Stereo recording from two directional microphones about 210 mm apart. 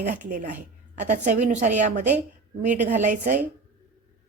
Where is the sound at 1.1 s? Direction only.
35° right (ahead or behind).